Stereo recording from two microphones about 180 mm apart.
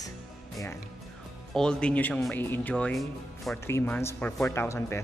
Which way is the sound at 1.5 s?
5° left (ahead or behind).